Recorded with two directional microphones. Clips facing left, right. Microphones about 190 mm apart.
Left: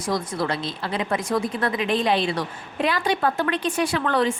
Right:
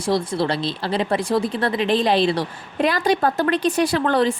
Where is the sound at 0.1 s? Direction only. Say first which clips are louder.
Right 4 dB; 30° right (ahead or behind).